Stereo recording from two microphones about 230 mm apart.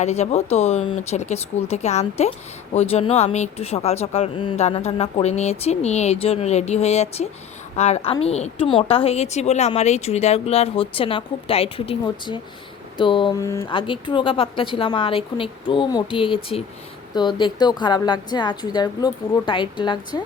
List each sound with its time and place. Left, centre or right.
0.0 s a woman's voice: left